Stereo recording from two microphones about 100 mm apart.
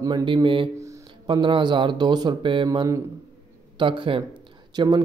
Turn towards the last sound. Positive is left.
turn(degrees=-45)  # may be behind; listen again after turning